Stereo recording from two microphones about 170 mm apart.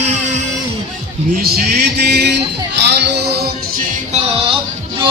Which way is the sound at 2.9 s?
80° right.